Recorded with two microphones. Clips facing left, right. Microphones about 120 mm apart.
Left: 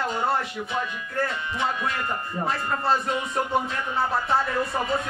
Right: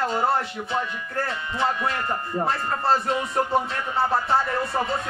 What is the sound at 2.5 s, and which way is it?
Speech, centre (ahead or behind).